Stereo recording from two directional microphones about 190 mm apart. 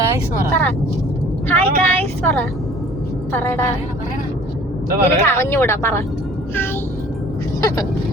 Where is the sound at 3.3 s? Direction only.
15° left (ahead or behind).